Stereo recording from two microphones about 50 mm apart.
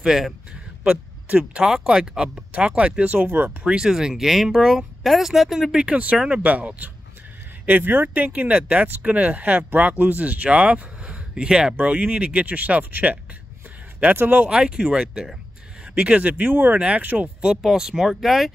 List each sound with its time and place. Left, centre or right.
0.0 s a man's voice: centre
0.8 s speech: right
3.3 s speech: right
3.6 s speech: centre
6.4 s speech: right
14.5 s speech: centre
15.8 s speech: right
17.6 s speech: centre